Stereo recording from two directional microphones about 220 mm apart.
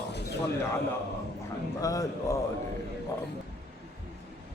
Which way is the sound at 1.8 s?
15° left (ahead or behind).